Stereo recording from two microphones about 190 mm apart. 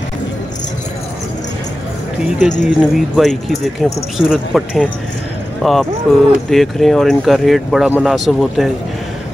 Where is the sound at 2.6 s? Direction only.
Centre (ahead or behind).